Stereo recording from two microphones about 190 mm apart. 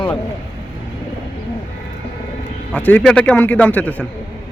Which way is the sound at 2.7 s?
10° left (ahead or behind).